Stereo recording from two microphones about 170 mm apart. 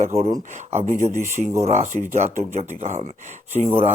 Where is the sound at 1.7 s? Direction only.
45° right (ahead or behind).